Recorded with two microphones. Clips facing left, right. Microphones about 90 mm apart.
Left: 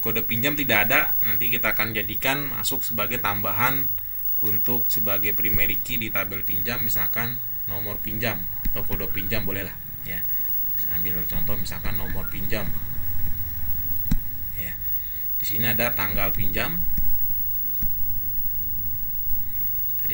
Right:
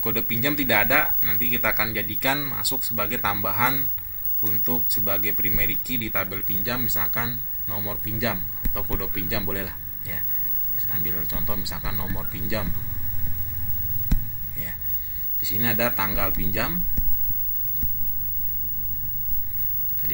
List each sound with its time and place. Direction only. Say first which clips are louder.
0.0 s speech: even; 10° right (ahead or behind)
14.1 s a sound: left 2 dB; 20° left (ahead or behind)
15.4 s speech: right 2 dB; 15° right (ahead or behind)